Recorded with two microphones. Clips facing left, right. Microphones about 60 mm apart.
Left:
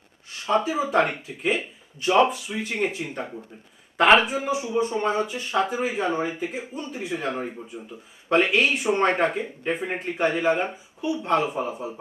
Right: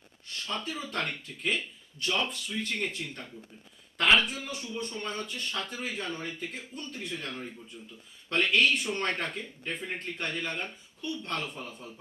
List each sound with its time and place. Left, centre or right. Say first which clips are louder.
0.3 s speech: left 13 dB; centre